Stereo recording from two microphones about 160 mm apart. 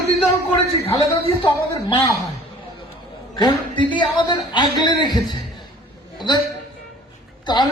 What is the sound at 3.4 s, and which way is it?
A man's voice, 30° left (ahead or behind).